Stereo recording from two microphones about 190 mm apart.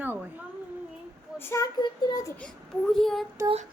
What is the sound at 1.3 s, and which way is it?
Speech, 15° left (ahead or behind).